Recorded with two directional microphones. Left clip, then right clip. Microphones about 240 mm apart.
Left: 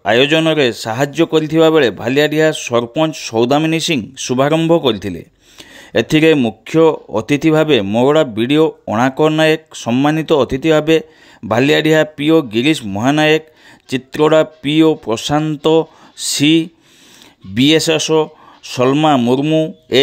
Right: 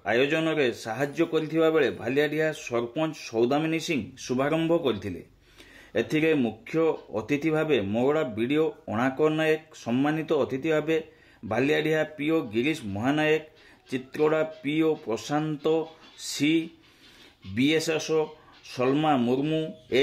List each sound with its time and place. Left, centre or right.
0.0 s speech: left